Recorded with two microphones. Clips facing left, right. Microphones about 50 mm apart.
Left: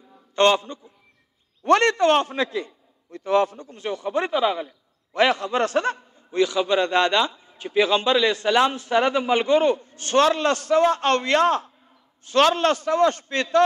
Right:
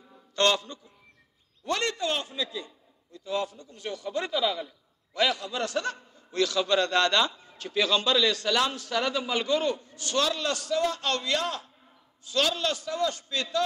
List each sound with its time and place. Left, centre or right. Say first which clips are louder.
0.4 s a man's voice: left 6 dB; left
1.6 s a man's voice: left 12 dB; left
3.7 s a man's voice: left 4 dB; left
6.1 s a man's voice: left 4 dB; left